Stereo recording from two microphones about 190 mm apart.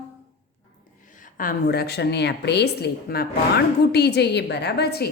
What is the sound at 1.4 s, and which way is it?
A woman's voice, 50° left (ahead or behind).